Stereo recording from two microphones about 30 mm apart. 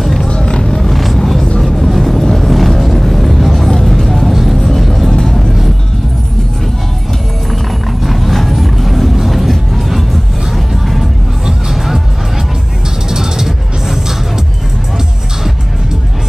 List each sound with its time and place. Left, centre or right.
0.3 s music: left
0.9 s vehicle: centre
2.3 s a sound: centre
2.8 s music: centre
4.3 s music: centre
4.8 s vehicle: centre
5.1 s music: centre
8.0 s music: centre
13.1 s music: centre